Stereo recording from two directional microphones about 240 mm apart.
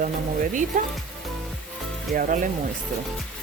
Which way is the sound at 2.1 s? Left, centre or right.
Right.